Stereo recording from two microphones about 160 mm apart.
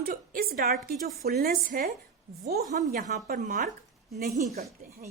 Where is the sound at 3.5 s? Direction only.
50° right (ahead or behind).